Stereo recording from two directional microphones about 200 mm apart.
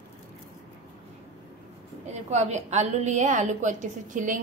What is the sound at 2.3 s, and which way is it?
A woman's voice, 35° right (ahead or behind).